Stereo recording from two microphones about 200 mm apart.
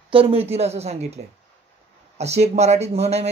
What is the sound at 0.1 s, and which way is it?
A woman's voice, 30° right (ahead or behind).